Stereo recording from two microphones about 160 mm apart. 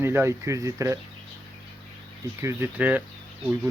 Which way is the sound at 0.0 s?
15° right (ahead or behind).